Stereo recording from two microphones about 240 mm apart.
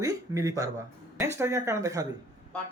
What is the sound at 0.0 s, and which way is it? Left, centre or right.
Speech, centre.